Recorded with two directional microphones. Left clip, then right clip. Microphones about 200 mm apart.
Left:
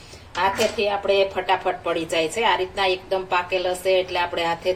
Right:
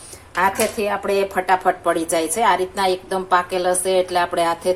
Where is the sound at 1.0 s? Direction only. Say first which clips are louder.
Left 2 dB; 35° right (ahead or behind).